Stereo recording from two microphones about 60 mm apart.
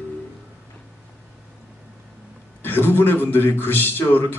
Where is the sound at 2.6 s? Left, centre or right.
Left.